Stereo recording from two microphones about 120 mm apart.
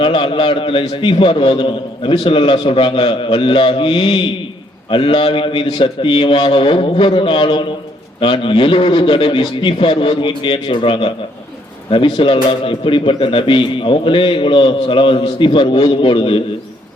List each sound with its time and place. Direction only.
0.0 s speech: 45° left (ahead or behind)